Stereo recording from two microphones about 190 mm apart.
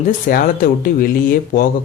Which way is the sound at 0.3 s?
50° left (ahead or behind).